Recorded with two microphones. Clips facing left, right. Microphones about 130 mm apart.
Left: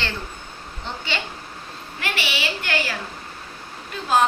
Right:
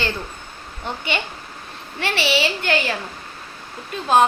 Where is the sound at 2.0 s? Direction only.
35° right (ahead or behind).